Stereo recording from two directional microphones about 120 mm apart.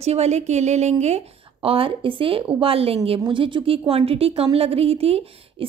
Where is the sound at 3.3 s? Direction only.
45° right (ahead or behind).